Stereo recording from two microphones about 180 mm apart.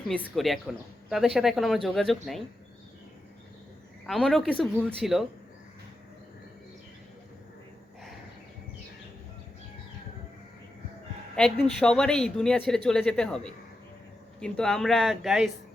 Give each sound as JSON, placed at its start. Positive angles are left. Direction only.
{"t": 0.3, "sound": "speech", "side_deg": 0}
{"t": 4.0, "sound": "speech", "side_deg": 0}
{"t": 11.6, "sound": "speech", "side_deg": 5}